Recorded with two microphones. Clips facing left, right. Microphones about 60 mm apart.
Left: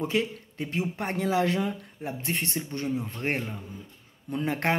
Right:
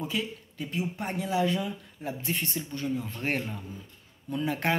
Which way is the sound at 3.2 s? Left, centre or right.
Left.